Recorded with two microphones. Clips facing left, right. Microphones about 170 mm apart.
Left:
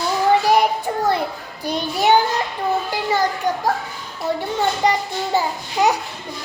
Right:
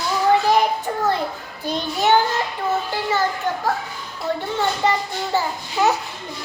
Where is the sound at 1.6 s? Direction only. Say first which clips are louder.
Left 2 dB; 15° left (ahead or behind).